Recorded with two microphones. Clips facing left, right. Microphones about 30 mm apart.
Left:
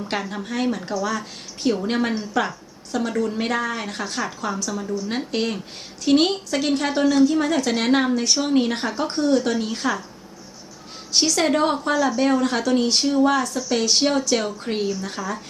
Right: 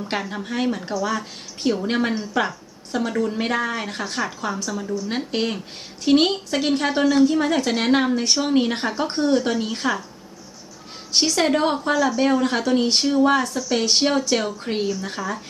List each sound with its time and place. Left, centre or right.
0.0 s a woman's voice: centre
0.9 s speech: right
1.6 s a woman's voice: centre
9.6 s a woman's voice: centre
11.1 s a woman's voice: centre
13.6 s speech: centre
13.8 s a woman's voice: centre